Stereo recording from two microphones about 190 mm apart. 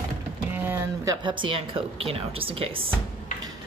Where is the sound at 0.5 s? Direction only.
10° right (ahead or behind); by 2.9 s 30° right (ahead or behind).